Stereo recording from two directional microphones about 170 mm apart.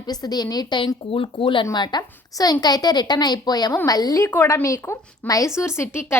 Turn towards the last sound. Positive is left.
turn(degrees=15)  # may be behind; listen again after turning